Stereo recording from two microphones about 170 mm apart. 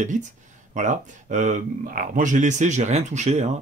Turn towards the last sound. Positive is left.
turn(degrees=-40)  # may be behind; listen again after turning